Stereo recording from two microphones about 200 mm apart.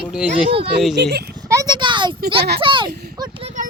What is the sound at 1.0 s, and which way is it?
Speech, 55° right (ahead or behind).